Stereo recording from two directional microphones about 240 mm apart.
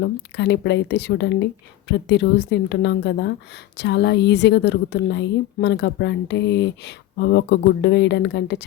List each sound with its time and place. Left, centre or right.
0.0 s a woman's voice: left